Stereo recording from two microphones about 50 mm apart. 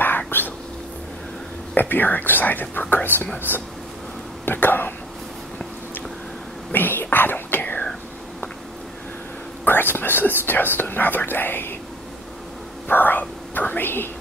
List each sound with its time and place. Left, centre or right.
0.3 s whispering: left
1.8 s speech: left
6.7 s whispering: left
9.7 s whispering: left
12.9 s whispering: left